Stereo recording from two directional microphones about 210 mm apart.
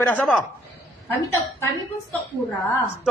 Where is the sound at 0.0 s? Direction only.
5° left (ahead or behind).